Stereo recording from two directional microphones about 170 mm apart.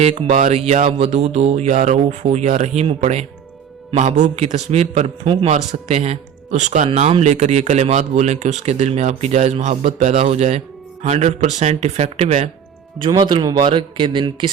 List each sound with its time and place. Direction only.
0.0 s a man's voice: 40° right (ahead or behind)
13.0 s speech: 25° right (ahead or behind)